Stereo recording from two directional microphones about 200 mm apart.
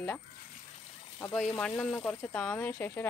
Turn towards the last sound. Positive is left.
turn(degrees=10)  # may be behind; listen again after turning